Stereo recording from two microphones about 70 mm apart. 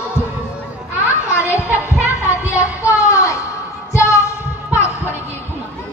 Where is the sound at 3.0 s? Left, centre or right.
Left.